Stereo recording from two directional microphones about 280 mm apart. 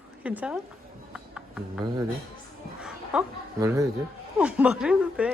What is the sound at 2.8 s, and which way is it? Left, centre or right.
A woman's voice, centre.